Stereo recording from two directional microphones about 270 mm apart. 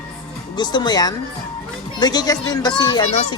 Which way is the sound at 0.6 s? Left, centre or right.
Centre.